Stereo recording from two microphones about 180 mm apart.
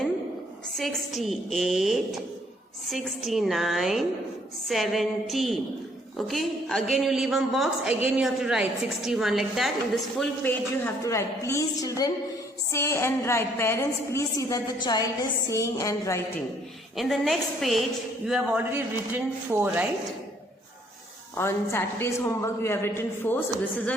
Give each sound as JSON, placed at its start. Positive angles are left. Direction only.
{"t": 0.7, "sound": "a woman's voice", "side_deg": 0}
{"t": 17.0, "sound": "a woman's voice", "side_deg": 0}
{"t": 21.3, "sound": "a man's voice", "side_deg": 15}